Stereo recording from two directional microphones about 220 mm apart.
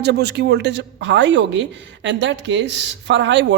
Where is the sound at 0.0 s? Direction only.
50° right (ahead or behind).